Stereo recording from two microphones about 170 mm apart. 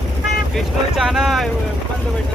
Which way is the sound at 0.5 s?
Centre (ahead or behind).